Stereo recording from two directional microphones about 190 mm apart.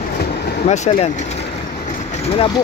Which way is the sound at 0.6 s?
35° left (ahead or behind).